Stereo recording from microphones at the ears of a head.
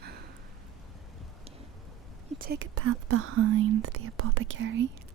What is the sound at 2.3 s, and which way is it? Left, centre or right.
Speech, right.